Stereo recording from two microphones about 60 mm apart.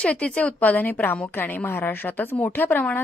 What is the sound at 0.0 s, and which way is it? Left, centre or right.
A woman's voice, centre.